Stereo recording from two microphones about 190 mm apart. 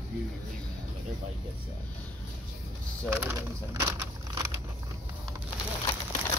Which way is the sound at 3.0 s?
10° right (ahead or behind).